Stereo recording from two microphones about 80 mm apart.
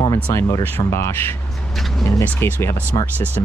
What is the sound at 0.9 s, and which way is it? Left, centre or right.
Speech, left.